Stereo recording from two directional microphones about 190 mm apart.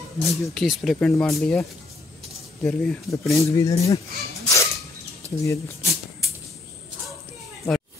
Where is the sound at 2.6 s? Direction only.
5° left (ahead or behind).